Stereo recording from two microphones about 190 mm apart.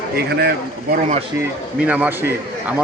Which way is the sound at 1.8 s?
10° right (ahead or behind).